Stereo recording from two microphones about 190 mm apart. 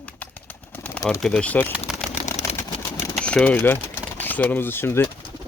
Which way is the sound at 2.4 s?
15° left (ahead or behind).